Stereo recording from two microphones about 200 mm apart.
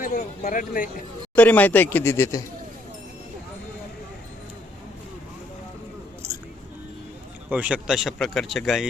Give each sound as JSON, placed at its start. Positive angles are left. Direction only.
{"t": 0.0, "sound": "speech", "side_deg": 40}
{"t": 1.4, "sound": "speech", "side_deg": 10}
{"t": 6.2, "sound": "a sound", "side_deg": -10}
{"t": 7.5, "sound": "speech", "side_deg": -5}